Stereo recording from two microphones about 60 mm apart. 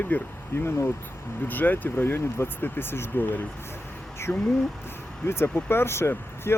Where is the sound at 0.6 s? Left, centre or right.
Left.